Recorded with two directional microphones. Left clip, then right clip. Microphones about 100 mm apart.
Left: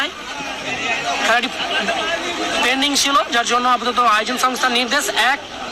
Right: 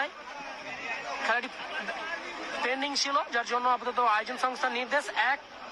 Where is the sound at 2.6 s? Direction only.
25° left (ahead or behind).